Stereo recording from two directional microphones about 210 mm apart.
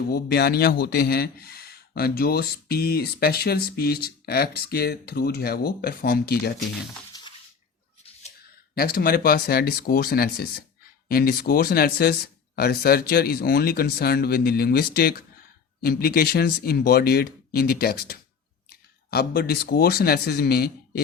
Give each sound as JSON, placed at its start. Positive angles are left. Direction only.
{"t": 0.1, "sound": "speech", "side_deg": 50}
{"t": 8.7, "sound": "speech", "side_deg": 45}